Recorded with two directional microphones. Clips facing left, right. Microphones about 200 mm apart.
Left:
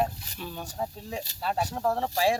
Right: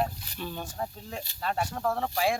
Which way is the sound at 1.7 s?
15° left (ahead or behind).